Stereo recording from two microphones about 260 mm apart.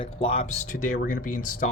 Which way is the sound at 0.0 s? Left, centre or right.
Left.